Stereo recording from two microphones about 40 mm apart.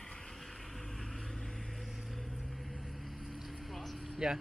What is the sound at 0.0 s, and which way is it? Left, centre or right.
Vehicle, centre.